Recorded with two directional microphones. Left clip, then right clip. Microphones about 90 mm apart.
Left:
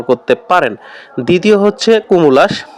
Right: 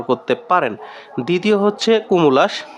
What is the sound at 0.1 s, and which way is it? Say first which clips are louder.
Speech: left 6 dB; 30° left (ahead or behind).